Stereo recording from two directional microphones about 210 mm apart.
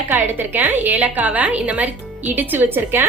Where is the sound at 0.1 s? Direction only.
10° right (ahead or behind).